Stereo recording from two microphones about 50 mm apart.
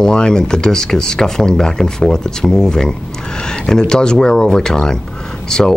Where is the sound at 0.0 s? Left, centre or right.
Centre.